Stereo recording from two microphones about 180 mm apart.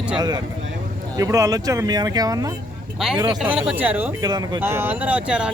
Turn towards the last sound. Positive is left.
turn(degrees=-5)  # may be behind; listen again after turning